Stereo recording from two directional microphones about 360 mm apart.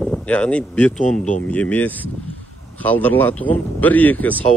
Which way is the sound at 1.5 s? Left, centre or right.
Centre.